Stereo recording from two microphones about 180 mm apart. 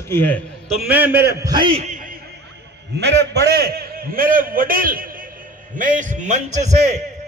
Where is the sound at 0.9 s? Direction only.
10° right (ahead or behind); by 1.8 s 25° right (ahead or behind).